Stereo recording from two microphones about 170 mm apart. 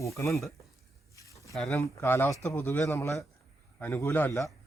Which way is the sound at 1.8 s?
15° left (ahead or behind).